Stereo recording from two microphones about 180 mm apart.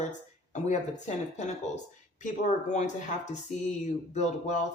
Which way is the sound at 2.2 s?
40° left (ahead or behind).